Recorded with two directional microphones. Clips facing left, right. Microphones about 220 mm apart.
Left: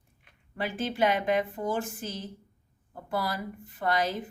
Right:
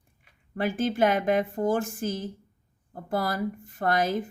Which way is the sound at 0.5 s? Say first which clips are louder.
Right 5 dB; 50° right (ahead or behind).